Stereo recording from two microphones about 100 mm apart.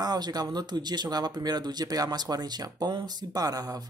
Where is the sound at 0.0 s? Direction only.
40° right (ahead or behind).